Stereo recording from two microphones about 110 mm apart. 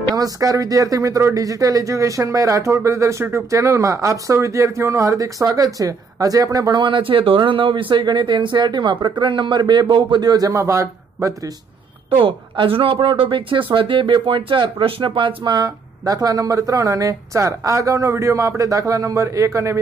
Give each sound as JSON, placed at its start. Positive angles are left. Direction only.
{"t": 0.1, "sound": "speech", "side_deg": -35}
{"t": 6.8, "sound": "speech", "side_deg": -50}
{"t": 12.2, "sound": "speech", "side_deg": -50}